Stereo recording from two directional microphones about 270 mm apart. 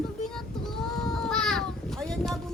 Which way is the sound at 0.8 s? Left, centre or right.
Centre.